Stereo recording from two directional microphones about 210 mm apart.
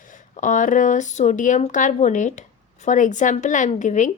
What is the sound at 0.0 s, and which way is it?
Speech, 40° left (ahead or behind).